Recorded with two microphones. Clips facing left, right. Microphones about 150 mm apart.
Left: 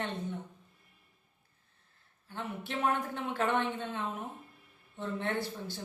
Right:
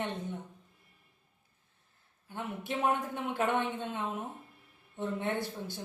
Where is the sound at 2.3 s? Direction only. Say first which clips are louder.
Right 2 dB; 15° right (ahead or behind).